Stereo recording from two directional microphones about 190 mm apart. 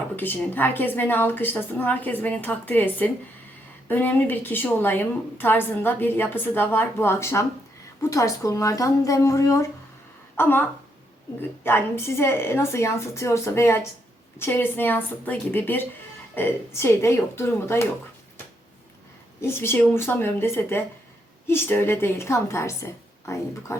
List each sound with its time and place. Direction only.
0.2 s a woman's voice: 10° left (ahead or behind)
19.4 s a woman's voice: 15° left (ahead or behind)